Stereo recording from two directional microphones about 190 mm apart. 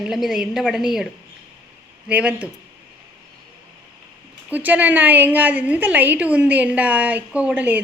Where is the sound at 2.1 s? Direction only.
5° right (ahead or behind).